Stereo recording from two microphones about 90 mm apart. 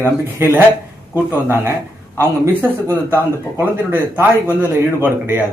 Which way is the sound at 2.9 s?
25° right (ahead or behind).